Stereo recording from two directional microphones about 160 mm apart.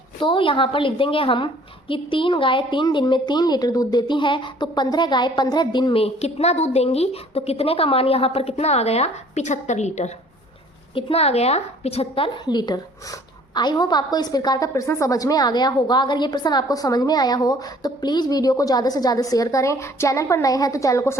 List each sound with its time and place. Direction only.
0.2 s a woman's voice: 30° left (ahead or behind)